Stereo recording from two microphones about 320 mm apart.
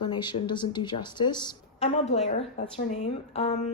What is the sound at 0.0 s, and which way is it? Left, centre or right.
Speech, centre.